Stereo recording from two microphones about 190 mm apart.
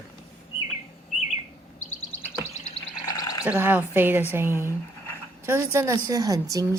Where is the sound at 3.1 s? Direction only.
20° left (ahead or behind).